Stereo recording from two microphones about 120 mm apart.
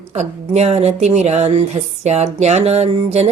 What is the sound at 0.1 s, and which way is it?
Speech, 65° right (ahead or behind).